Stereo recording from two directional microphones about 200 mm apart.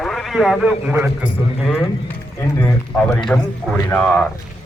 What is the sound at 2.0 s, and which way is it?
Speech, 15° left (ahead or behind).